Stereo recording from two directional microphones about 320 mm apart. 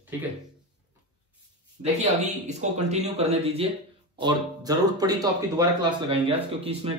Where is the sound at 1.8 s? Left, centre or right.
Right.